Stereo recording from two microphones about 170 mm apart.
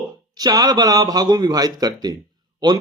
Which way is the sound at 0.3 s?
25° right (ahead or behind).